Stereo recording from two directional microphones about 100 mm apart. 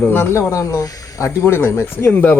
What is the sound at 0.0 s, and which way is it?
Speech, 20° left (ahead or behind).